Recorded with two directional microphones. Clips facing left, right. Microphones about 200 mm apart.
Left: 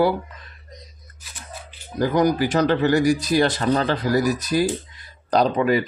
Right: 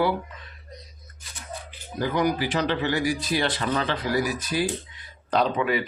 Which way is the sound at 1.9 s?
40° left (ahead or behind).